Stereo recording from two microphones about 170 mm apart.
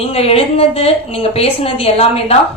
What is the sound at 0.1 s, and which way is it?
A woman's voice, 35° left (ahead or behind).